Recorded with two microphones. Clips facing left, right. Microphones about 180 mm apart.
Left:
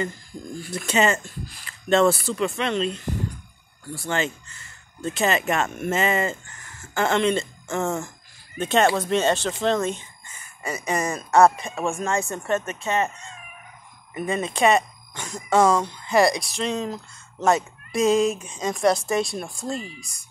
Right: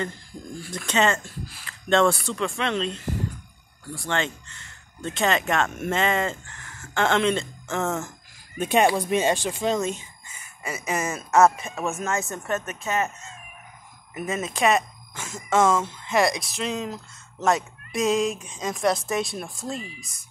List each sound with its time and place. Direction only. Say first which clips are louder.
0.6 s speech: left 1 dB; 5° left (ahead or behind)
8.5 s speech: even; 10° right (ahead or behind)
10.6 s speech: left 3 dB; 35° left (ahead or behind)
11.1 s speech: left 1 dB; 5° right (ahead or behind)